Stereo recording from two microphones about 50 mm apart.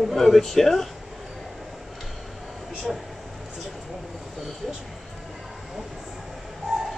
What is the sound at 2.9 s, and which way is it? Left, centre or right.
Speech, centre.